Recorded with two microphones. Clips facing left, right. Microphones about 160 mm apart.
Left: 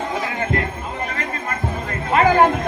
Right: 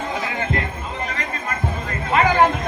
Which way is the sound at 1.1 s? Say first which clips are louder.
Left 1 dB; 45° left (ahead or behind).